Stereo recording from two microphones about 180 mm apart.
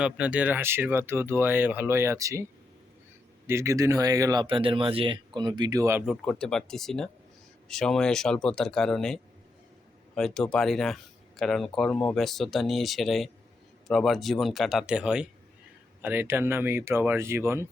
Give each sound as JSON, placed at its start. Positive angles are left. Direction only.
{"t": 0.0, "sound": "speech", "side_deg": -5}
{"t": 6.1, "sound": "speech", "side_deg": 5}